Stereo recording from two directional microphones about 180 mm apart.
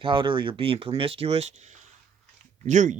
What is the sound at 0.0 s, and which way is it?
Speech, 25° right (ahead or behind).